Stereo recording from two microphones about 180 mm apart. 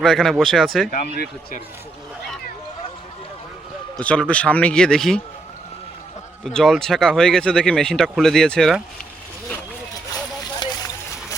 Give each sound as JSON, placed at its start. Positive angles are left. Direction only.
{"t": 0.0, "sound": "speech", "side_deg": 0}
{"t": 0.9, "sound": "speech", "side_deg": 55}
{"t": 4.0, "sound": "speech", "side_deg": 5}
{"t": 6.4, "sound": "speech", "side_deg": 0}
{"t": 10.6, "sound": "a sound", "side_deg": 20}